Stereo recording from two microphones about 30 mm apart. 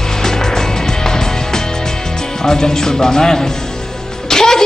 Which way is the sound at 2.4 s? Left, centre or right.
Left.